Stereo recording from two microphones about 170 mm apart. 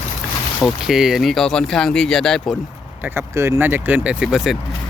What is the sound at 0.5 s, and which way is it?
Speech, centre (ahead or behind).